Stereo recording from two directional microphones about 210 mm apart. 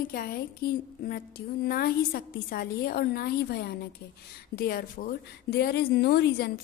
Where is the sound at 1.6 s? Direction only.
45° left (ahead or behind).